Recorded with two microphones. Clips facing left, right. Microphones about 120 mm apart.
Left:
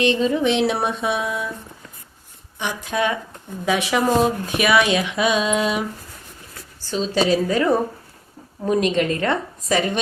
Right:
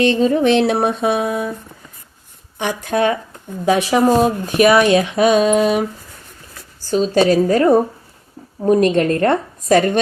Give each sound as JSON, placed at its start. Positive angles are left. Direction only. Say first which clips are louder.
{"t": 0.0, "sound": "a woman's voice", "louder": "right 4 dB", "side_deg": -40}
{"t": 2.6, "sound": "a woman's voice", "louder": "right 5 dB", "side_deg": -55}
{"t": 6.9, "sound": "a woman's voice", "louder": "right 6 dB", "side_deg": -50}